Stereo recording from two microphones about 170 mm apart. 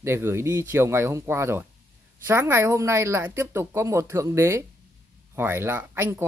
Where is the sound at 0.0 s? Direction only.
15° right (ahead or behind).